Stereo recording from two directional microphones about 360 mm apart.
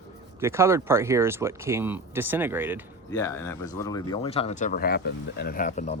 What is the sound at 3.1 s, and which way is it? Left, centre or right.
Speech, centre.